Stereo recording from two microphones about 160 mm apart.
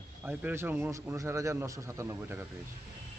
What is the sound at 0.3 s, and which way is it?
Speech, 15° right (ahead or behind).